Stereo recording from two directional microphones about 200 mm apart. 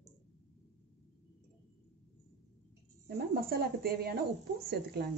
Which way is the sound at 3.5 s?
50° right (ahead or behind).